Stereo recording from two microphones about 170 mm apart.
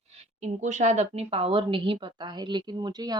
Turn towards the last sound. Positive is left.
turn(degrees=-25)  # may be behind; listen again after turning